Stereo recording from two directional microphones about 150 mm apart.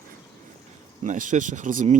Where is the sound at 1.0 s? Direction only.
55° right (ahead or behind).